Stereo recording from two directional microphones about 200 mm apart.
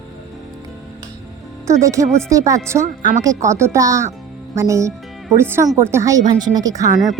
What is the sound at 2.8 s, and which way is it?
Speech, 40° right (ahead or behind).